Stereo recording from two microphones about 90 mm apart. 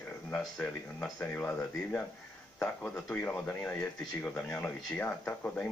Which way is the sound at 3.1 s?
20° left (ahead or behind).